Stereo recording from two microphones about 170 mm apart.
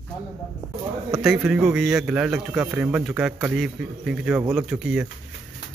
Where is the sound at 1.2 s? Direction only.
Centre (ahead or behind).